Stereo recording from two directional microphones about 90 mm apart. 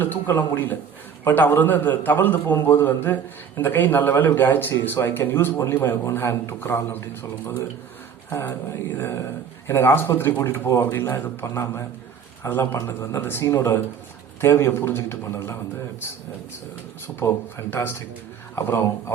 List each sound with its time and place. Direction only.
0.0 s a man's voice: 20° left (ahead or behind)
9.6 s a man's voice: 25° left (ahead or behind)
17.1 s a man's voice: 20° left (ahead or behind)